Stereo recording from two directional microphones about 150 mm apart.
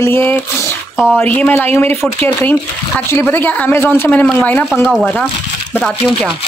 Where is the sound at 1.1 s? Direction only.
10° left (ahead or behind).